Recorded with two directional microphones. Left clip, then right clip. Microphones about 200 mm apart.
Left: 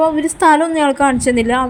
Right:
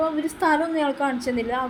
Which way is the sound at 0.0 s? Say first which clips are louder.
Left 10 dB; 45° left (ahead or behind).